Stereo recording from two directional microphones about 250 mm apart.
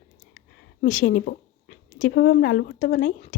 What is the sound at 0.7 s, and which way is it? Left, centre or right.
Speech, left.